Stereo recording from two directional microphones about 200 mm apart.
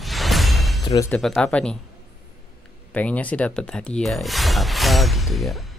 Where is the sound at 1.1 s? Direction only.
Centre (ahead or behind).